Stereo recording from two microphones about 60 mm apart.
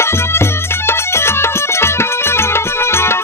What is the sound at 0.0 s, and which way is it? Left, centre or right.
Music, left.